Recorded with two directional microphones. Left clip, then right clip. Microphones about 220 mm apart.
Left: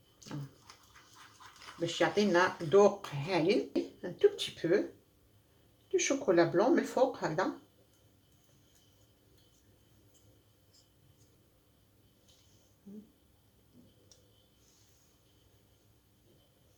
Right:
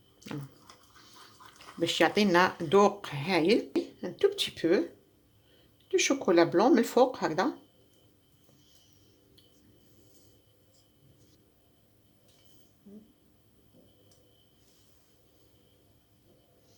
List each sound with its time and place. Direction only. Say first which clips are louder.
1.8 s speech: right 5 dB; 45° right (ahead or behind)
5.9 s speech: right 4 dB; 45° right (ahead or behind)